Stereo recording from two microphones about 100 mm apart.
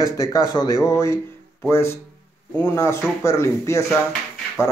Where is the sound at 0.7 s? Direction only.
30° left (ahead or behind).